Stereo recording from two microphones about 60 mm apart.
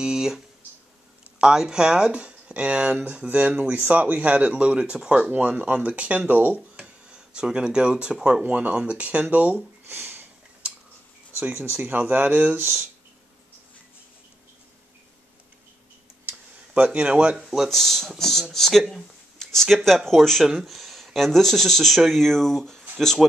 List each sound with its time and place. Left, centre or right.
0.0 s speech: centre
1.4 s speech: centre; by 6.6 s right
7.1 s speech: centre
8.5 s speech: right
9.8 s a sound: right
10.6 s tick-tock: centre
11.5 s speech: right
16.3 s a sound: right
17.5 s speech: centre